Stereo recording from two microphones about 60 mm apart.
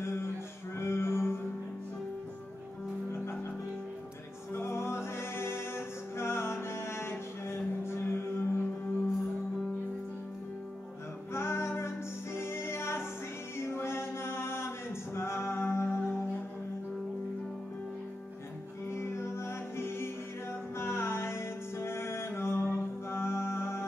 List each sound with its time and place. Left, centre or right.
0.0 s music: left
0.7 s a sound: left
4.6 s music: left
11.3 s music: left
18.9 s music: left